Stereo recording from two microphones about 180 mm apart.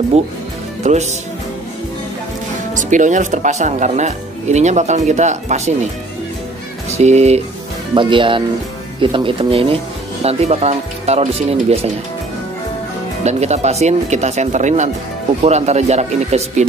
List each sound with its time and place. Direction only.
0.8 s speech: 40° right (ahead or behind)
2.7 s speech: 45° right (ahead or behind)
7.0 s speech: 35° right (ahead or behind)
13.2 s speech: 40° right (ahead or behind)